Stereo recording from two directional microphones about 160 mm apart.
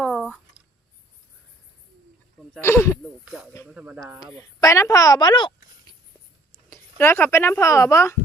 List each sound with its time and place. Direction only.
0.0 s a sound: 5° left (ahead or behind)
2.6 s speech: 15° left (ahead or behind)
3.0 s speech: 5° right (ahead or behind)
4.2 s speech: 20° left (ahead or behind)
6.7 s speech: 15° left (ahead or behind)